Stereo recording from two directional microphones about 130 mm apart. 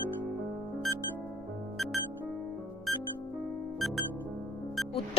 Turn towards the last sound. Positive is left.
turn(degrees=0)  # may be behind; listen again after turning